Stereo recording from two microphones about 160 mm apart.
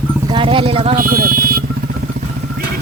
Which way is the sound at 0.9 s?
60° right (ahead or behind).